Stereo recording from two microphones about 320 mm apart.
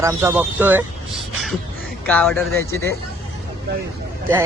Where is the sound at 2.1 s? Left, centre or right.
Centre.